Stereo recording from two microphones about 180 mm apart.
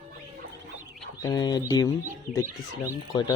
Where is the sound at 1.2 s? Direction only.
20° left (ahead or behind).